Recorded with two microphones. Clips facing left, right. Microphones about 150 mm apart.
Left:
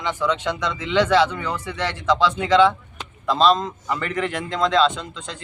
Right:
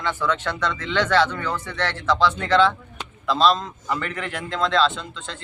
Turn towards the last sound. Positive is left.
turn(degrees=0)  # may be behind; listen again after turning